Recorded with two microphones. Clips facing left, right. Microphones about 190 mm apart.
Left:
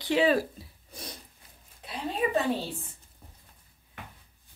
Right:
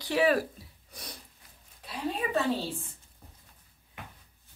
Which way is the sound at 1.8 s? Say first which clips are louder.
Left 2 dB; 20° left (ahead or behind).